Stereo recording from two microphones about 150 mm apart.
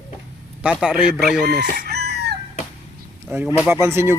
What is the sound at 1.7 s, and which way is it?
Chicken, 90° right.